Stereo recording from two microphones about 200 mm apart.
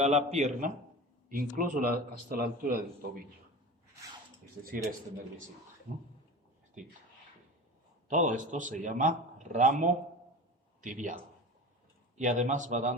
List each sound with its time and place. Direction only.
0.3 s a man's voice: 35° right (ahead or behind)
4.6 s speech: 45° right (ahead or behind)
6.8 s a man's voice: 40° right (ahead or behind)
8.0 s a man's voice: 40° right (ahead or behind)